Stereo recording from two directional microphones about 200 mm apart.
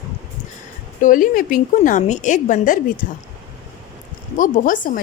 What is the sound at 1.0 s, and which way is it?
Speech, 45° left (ahead or behind).